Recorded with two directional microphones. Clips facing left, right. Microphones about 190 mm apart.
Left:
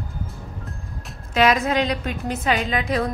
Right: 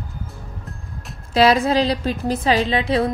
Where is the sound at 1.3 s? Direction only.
30° right (ahead or behind).